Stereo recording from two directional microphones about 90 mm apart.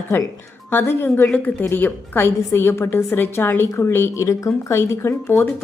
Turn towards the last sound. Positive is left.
turn(degrees=25)  # may be behind; listen again after turning